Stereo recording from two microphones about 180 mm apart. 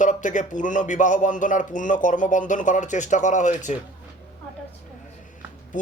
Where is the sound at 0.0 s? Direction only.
45° left (ahead or behind).